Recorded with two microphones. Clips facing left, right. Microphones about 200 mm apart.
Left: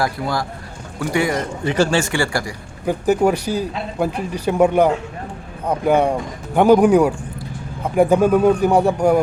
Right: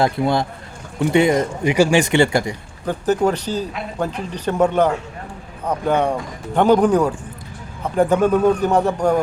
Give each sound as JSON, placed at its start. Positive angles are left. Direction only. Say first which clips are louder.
{"t": 0.0, "sound": "speech", "louder": "right 4 dB", "side_deg": -25}
{"t": 2.8, "sound": "speech", "louder": "left 2 dB", "side_deg": 10}